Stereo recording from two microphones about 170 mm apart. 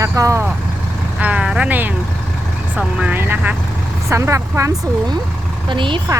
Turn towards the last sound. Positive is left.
turn(degrees=-30)  # may be behind; listen again after turning